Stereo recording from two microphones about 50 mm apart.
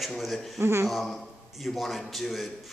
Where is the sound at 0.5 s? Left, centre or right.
Right.